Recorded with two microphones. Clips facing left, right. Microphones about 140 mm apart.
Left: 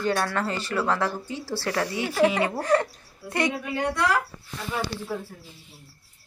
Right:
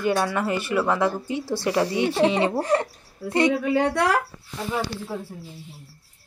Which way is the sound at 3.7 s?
65° right (ahead or behind).